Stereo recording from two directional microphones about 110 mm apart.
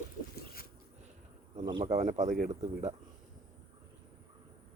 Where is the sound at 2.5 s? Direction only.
55° right (ahead or behind).